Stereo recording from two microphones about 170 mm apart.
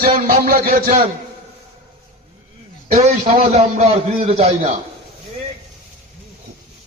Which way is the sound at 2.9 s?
40° right (ahead or behind).